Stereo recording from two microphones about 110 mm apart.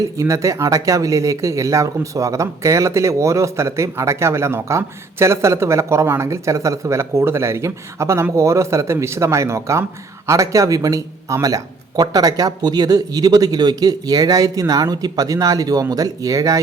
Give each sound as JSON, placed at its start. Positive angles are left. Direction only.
{"t": 0.2, "sound": "speech", "side_deg": -30}